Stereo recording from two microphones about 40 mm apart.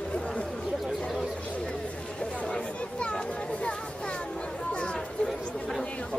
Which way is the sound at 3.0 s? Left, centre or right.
Left.